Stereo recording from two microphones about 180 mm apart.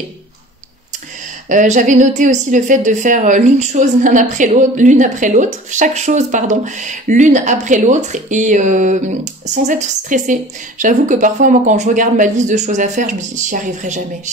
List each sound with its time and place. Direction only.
1.5 s a woman's voice: 45° right (ahead or behind)